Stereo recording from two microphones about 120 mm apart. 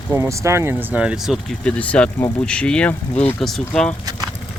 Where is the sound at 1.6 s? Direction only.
10° left (ahead or behind).